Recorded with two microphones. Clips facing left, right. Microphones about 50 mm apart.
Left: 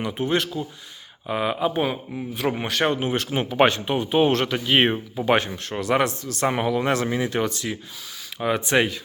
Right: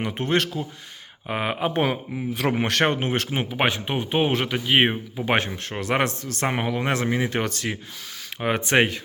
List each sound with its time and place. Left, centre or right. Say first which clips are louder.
0.0 s speech: even; right
1.3 s speech: left 2 dB; right
1.7 s a man's voice: right 1 dB; right
2.8 s speech: left 3 dB; right
3.2 s speech: left 4 dB; right
5.2 s speech: left 2 dB; right
6.5 s speech: left 3 dB; right